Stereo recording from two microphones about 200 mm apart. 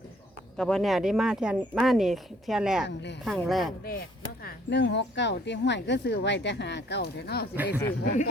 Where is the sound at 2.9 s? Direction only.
60° left (ahead or behind).